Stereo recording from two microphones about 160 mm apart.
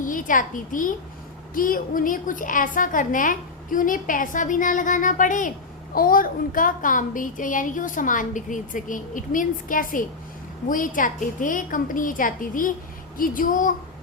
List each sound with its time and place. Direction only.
0.0 s a child's voice: 55° left (ahead or behind)